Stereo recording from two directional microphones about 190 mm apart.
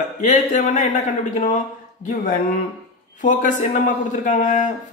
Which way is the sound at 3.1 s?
40° left (ahead or behind).